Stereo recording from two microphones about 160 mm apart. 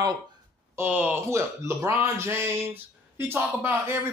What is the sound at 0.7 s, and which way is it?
Speech, 10° right (ahead or behind).